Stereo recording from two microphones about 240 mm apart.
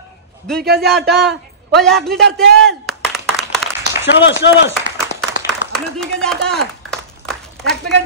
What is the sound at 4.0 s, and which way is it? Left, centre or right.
Speech, left.